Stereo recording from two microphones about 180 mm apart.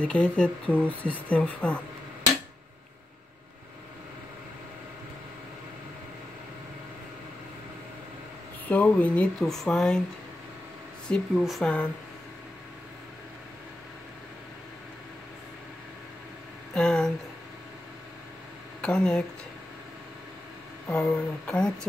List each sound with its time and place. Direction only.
0.0 s speech: 5° left (ahead or behind)
8.6 s speech: 10° left (ahead or behind)
11.1 s speech: centre (ahead or behind)
16.7 s a sound: 5° left (ahead or behind)
18.8 s speech: 5° left (ahead or behind)
20.8 s speech: 10° left (ahead or behind)